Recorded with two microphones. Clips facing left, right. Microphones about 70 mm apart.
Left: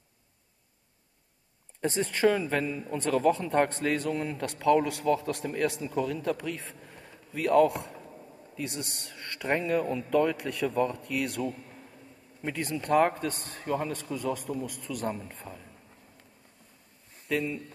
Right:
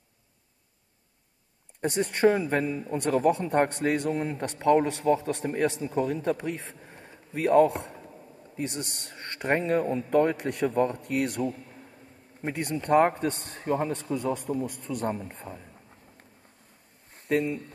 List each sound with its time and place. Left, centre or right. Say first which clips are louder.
1.8 s a man's voice: right 2 dB; right
4.1 s a man's voice: right 2 dB; right